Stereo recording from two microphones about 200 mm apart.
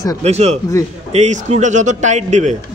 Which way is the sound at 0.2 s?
30° right (ahead or behind).